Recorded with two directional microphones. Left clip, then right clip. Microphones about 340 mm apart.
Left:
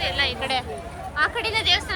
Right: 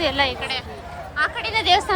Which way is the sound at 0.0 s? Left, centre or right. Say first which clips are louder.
Right 3 dB; centre.